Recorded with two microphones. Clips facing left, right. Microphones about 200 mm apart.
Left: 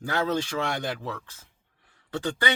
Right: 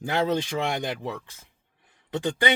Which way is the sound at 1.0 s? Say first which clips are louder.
Right 2 dB; 15° right (ahead or behind).